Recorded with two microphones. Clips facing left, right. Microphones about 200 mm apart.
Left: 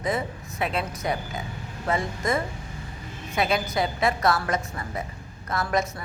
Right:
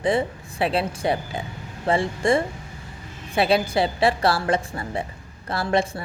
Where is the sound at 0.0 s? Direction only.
30° right (ahead or behind).